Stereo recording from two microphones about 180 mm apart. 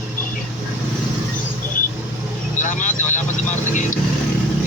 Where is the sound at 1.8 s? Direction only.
50° left (ahead or behind).